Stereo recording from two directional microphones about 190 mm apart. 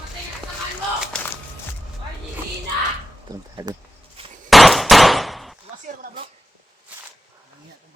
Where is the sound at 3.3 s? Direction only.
20° right (ahead or behind).